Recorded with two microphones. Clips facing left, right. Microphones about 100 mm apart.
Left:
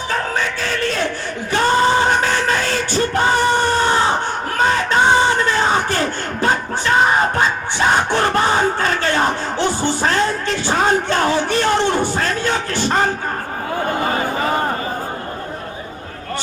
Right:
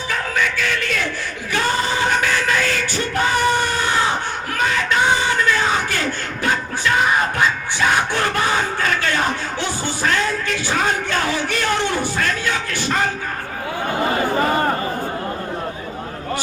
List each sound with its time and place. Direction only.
0.1 s music: 35° left (ahead or behind)
3.5 s chicken: 40° left (ahead or behind)
4.5 s a sound: 35° left (ahead or behind)
5.2 s crowd: 35° left (ahead or behind)
9.6 s music: 50° left (ahead or behind)
11.4 s a sound: 35° left (ahead or behind)